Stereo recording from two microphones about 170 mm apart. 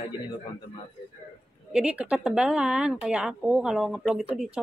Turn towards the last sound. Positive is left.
turn(degrees=-5)  # may be behind; listen again after turning